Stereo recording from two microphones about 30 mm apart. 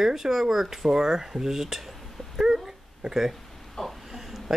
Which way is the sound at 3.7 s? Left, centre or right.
Centre.